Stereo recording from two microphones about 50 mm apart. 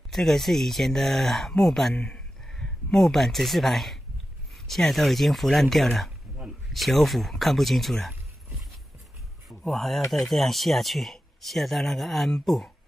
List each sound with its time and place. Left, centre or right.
0.1 s speech: centre
2.0 s speech: left
2.4 s speech: centre
9.7 s speech: centre